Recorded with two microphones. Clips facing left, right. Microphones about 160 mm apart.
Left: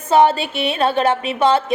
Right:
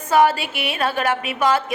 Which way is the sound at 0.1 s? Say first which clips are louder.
Left 3 dB; 25° left (ahead or behind).